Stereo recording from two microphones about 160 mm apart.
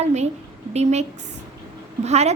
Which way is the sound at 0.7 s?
45° right (ahead or behind).